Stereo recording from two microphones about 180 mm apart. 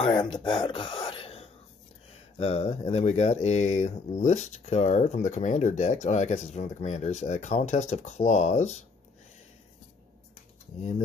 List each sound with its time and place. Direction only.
0.0 s speech: 25° left (ahead or behind); by 8.7 s 40° left (ahead or behind)